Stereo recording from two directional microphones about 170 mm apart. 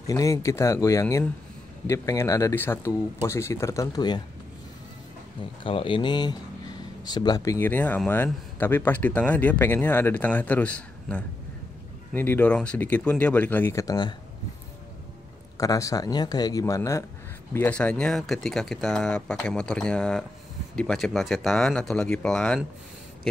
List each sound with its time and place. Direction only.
0.0 s a man's voice: 20° left (ahead or behind)
5.6 s a man's voice: 30° left (ahead or behind)
15.5 s speech: 20° left (ahead or behind)
17.6 s speech: 10° left (ahead or behind)